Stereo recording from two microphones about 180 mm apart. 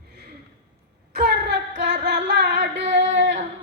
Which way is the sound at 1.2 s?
70° right (ahead or behind).